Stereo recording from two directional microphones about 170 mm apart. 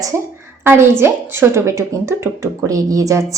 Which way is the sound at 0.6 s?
15° right (ahead or behind).